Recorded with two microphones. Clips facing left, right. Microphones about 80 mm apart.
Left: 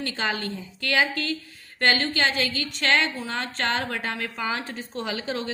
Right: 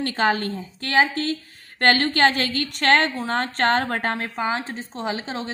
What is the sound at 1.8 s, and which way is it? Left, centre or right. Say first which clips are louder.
A woman's voice: right 5 dB; right.